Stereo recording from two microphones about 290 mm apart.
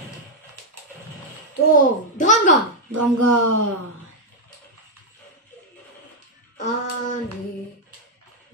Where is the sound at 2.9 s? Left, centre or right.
Right.